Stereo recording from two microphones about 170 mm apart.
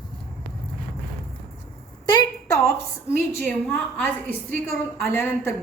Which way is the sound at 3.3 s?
10° left (ahead or behind).